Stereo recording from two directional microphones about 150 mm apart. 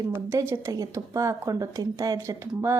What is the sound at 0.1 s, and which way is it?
A woman's voice, 15° right (ahead or behind).